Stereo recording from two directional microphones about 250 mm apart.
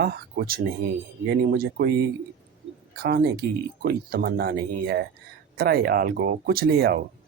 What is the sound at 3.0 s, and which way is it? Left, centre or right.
Speech, right.